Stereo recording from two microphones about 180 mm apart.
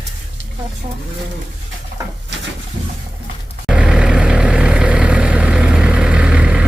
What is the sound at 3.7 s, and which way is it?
Vehicle, 5° right (ahead or behind).